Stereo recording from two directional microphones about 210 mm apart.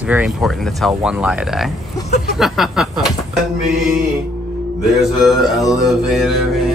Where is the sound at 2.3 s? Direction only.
Centre (ahead or behind).